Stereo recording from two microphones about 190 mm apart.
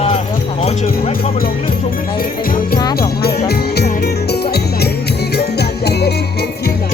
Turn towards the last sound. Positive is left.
turn(degrees=60)  # may be behind; listen again after turning